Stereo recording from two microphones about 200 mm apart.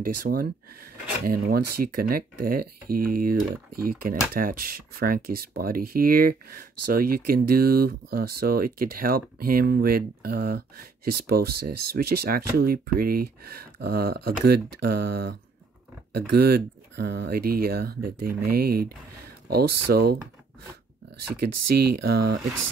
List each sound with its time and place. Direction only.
0.0 s speech: 45° right (ahead or behind)
21.4 s speech: 50° right (ahead or behind)